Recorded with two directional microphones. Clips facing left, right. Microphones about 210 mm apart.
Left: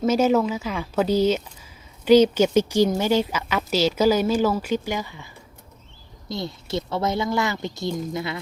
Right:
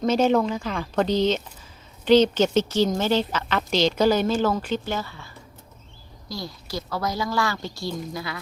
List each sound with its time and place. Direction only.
0.0 s a woman's voice: 5° left (ahead or behind); by 8.4 s 25° left (ahead or behind)